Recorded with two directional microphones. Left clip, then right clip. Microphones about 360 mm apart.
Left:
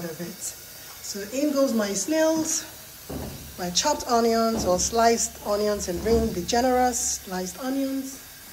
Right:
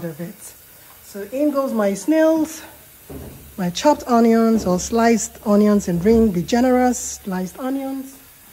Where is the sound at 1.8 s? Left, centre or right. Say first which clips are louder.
Right 7 dB; centre.